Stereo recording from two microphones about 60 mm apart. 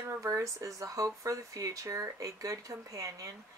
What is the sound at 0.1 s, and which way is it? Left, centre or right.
Speech, right.